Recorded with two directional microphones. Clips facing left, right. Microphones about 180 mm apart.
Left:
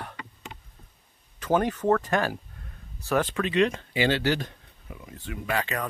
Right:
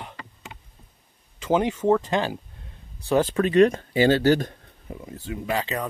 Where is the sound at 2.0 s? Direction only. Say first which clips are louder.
Right 1 dB; 20° right (ahead or behind); by 5.0 s 45° right (ahead or behind).